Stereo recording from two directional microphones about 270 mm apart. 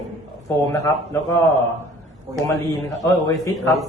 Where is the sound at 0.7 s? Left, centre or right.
Centre.